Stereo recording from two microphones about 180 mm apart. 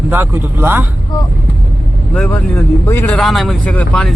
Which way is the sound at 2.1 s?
10° left (ahead or behind).